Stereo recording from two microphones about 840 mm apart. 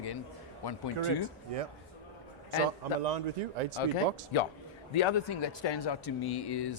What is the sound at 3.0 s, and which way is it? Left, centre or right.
Speech, right.